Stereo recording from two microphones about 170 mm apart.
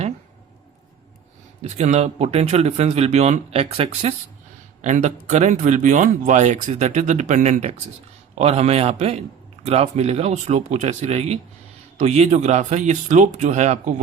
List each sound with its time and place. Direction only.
1.6 s speech: 40° right (ahead or behind)